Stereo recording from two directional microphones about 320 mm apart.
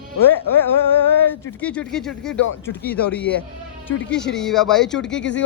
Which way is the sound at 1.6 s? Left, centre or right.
Centre.